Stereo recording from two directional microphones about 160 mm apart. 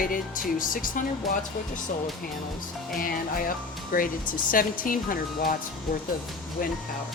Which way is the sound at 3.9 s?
60° left (ahead or behind).